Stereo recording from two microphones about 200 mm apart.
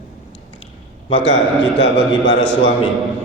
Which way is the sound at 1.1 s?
65° left (ahead or behind).